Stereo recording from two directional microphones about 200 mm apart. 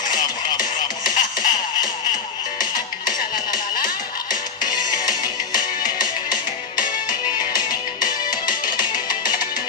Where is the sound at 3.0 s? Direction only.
45° left (ahead or behind).